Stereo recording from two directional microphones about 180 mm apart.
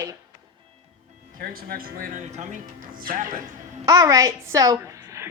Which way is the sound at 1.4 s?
55° right (ahead or behind).